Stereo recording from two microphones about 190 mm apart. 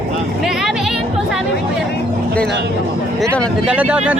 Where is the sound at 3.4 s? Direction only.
5° right (ahead or behind).